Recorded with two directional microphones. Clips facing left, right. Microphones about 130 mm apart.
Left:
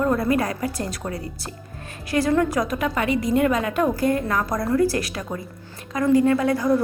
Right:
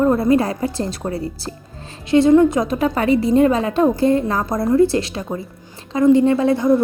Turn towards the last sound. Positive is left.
turn(degrees=-25)  # may be behind; listen again after turning